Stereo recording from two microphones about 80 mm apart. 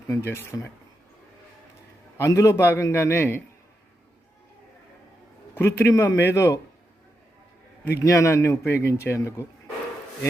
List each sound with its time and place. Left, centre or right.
0.1 s a man's voice: left
2.2 s a man's voice: left
5.5 s a man's voice: left
7.9 s a man's voice: left